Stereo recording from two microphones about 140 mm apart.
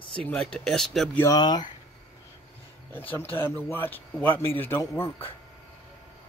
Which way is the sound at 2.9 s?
15° left (ahead or behind).